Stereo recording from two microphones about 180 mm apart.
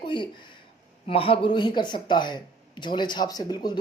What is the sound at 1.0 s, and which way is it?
Speech, 30° left (ahead or behind).